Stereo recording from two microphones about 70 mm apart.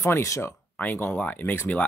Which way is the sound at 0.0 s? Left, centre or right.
Left.